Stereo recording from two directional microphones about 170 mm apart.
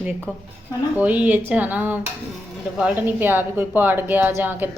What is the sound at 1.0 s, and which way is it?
Speech, 10° right (ahead or behind).